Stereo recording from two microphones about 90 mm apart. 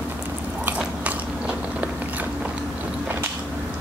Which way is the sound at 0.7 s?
15° right (ahead or behind).